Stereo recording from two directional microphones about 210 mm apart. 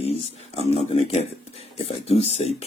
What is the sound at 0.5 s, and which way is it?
Speech, 30° left (ahead or behind).